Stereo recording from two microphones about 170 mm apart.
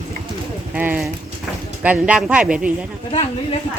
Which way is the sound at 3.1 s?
35° left (ahead or behind).